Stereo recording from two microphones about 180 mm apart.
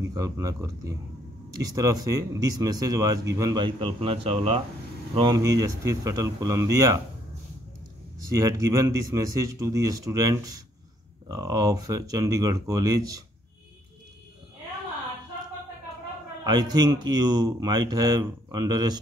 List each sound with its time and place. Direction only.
0.1 s speech: 20° right (ahead or behind)
5.1 s speech: 25° right (ahead or behind)
8.3 s speech: 20° right (ahead or behind)
16.4 s speech: 25° right (ahead or behind)